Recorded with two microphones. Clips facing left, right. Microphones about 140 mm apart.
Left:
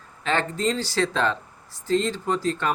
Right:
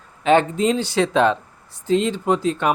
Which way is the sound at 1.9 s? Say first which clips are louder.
Right 4 dB; 15° right (ahead or behind).